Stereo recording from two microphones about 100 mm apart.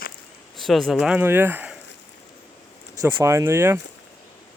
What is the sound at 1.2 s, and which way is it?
Speech, 20° right (ahead or behind).